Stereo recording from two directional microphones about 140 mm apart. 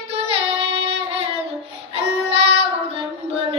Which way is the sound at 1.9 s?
45° right (ahead or behind).